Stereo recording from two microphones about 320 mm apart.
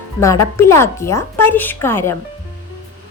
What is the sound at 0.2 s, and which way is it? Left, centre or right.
A child's voice, centre.